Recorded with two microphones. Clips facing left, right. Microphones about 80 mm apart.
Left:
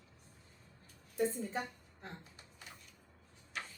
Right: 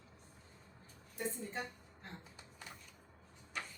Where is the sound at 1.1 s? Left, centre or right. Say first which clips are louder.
Left 6 dB; left.